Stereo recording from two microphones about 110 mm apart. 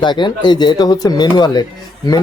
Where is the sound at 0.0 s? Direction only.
45° left (ahead or behind).